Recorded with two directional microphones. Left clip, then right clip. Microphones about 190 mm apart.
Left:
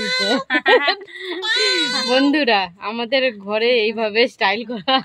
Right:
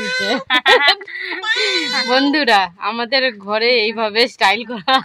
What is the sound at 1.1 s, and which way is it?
Baby cry, 15° left (ahead or behind).